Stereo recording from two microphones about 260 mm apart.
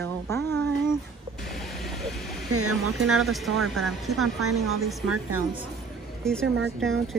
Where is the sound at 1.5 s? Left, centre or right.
Centre.